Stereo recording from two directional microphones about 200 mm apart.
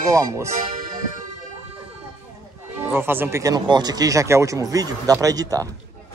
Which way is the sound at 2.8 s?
10° right (ahead or behind).